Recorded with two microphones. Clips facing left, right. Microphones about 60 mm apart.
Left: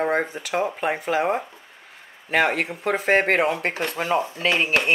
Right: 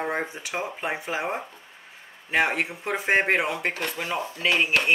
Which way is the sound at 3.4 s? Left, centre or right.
Left.